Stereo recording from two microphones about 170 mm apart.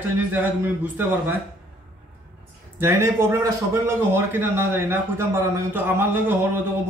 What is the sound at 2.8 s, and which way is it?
A man's voice, 15° right (ahead or behind).